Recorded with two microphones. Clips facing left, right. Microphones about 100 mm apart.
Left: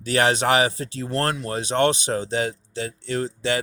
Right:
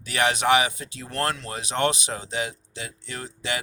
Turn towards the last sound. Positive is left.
turn(degrees=35)  # may be behind; listen again after turning